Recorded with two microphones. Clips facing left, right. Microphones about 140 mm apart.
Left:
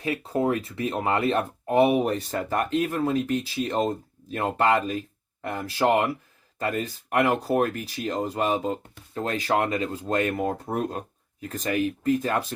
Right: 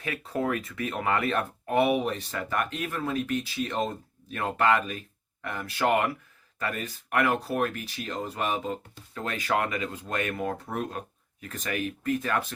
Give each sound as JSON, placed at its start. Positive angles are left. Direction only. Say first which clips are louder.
{"t": 0.0, "sound": "speech", "louder": "left 5 dB", "side_deg": 30}